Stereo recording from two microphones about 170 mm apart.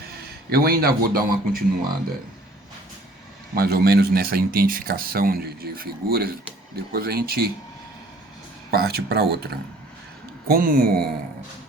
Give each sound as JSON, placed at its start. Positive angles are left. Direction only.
{"t": 0.5, "sound": "speech", "side_deg": -65}
{"t": 3.5, "sound": "speech", "side_deg": -65}
{"t": 8.7, "sound": "speech", "side_deg": -65}
{"t": 10.5, "sound": "speech", "side_deg": -55}